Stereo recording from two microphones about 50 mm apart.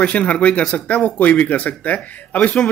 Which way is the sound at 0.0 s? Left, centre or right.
Left.